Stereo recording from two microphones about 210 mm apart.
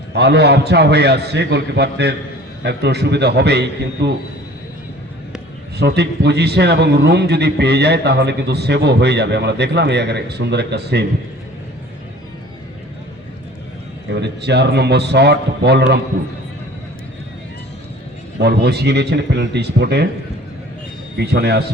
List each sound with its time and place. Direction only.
0.1 s a man's voice: 50° right (ahead or behind)
5.7 s a man's voice: 55° right (ahead or behind)
14.1 s a man's voice: 55° right (ahead or behind)
18.3 s a man's voice: 50° right (ahead or behind)
21.2 s a man's voice: 50° right (ahead or behind)